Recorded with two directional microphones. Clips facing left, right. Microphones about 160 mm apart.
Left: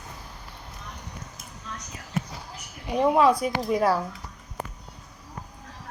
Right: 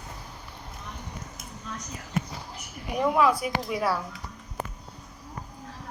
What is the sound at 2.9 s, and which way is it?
A woman's voice, 30° left (ahead or behind).